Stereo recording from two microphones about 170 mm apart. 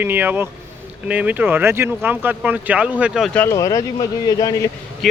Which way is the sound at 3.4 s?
20° left (ahead or behind).